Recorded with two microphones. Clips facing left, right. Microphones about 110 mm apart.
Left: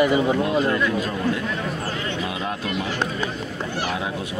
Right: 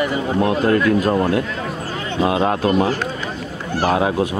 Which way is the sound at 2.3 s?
65° right (ahead or behind).